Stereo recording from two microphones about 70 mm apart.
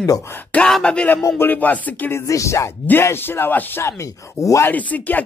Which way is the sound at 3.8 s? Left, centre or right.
Left.